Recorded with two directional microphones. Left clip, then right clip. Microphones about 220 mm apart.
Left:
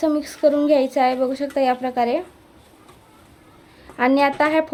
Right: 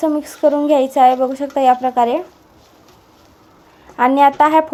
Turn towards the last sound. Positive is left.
turn(degrees=-5)  # may be behind; listen again after turning